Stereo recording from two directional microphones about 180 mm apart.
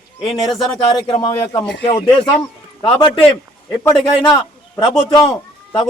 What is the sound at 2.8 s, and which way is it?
Speech, 30° left (ahead or behind).